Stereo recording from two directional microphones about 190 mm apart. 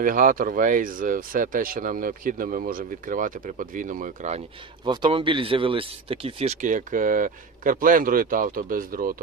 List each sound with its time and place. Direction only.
0.0 s speech: 45° right (ahead or behind)
4.9 s speech: 25° right (ahead or behind); by 9.2 s 45° right (ahead or behind)